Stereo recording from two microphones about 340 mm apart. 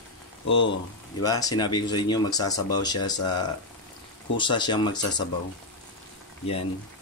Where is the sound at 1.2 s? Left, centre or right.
Centre.